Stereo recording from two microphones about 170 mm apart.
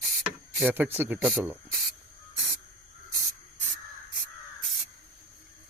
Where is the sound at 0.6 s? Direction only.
10° right (ahead or behind).